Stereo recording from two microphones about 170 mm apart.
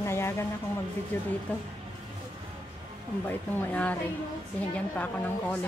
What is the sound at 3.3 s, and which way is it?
Speech, 10° left (ahead or behind).